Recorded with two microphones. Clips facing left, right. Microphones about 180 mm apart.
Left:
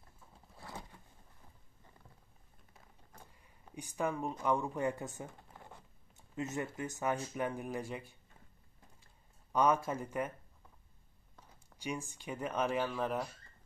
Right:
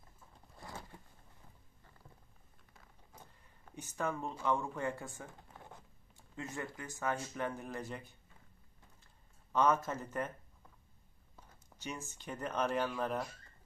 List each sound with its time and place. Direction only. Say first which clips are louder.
3.2 s speech: even; 10° left (ahead or behind)
9.5 s speech: left 1 dB; 10° left (ahead or behind)
11.8 s speech: left 4 dB; 10° left (ahead or behind)